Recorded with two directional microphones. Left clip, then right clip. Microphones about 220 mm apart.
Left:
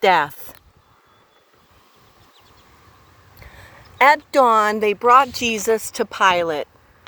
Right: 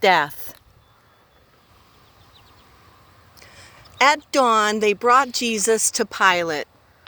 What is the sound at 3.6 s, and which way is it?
Speech, 35° right (ahead or behind).